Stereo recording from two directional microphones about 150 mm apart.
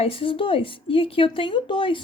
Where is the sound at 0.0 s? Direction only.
35° left (ahead or behind).